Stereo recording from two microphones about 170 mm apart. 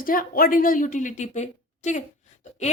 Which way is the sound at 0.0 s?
55° left (ahead or behind).